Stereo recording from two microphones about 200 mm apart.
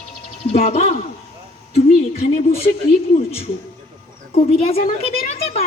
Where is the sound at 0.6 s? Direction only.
35° left (ahead or behind).